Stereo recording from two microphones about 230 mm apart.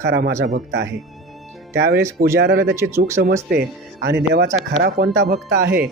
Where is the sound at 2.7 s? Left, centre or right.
Centre.